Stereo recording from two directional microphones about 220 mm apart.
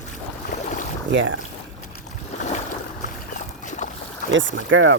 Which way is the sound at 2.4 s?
35° left (ahead or behind).